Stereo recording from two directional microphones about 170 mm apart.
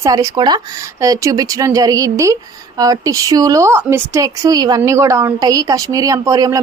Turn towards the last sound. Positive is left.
turn(degrees=-20)  # may be behind; listen again after turning